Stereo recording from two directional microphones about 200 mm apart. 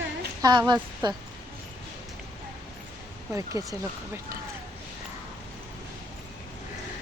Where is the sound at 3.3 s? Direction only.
15° right (ahead or behind).